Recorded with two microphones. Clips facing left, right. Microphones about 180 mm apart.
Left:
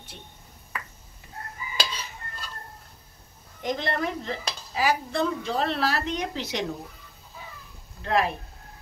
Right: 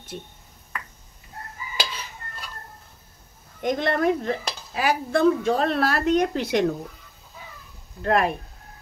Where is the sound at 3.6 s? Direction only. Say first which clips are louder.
Right 5 dB; 55° right (ahead or behind).